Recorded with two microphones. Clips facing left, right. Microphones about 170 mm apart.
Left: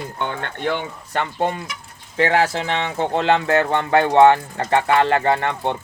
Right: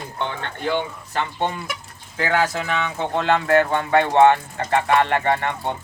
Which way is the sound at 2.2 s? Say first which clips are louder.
Left 3 dB; 30° left (ahead or behind).